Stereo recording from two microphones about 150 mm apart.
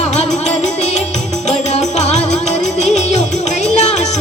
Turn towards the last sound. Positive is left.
turn(degrees=50)  # may be behind; listen again after turning